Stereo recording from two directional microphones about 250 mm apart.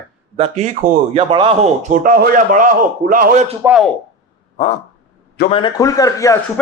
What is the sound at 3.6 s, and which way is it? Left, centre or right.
Speech, centre.